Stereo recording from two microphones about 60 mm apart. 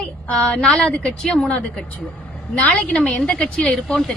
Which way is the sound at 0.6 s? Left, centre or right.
Centre.